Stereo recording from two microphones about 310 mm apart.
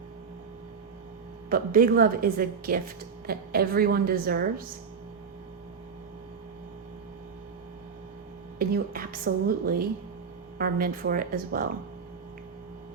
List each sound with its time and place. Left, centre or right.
1.5 s a woman's voice: right
8.5 s a woman's voice: right